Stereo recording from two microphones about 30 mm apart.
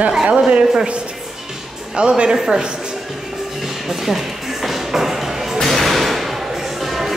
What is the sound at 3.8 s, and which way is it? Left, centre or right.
Music, centre.